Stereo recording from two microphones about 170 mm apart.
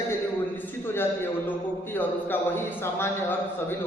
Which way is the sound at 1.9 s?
10° left (ahead or behind).